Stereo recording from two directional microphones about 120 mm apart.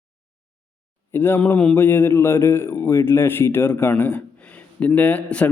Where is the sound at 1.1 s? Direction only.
20° left (ahead or behind).